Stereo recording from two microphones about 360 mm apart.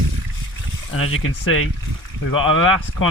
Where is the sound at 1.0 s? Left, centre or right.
Left.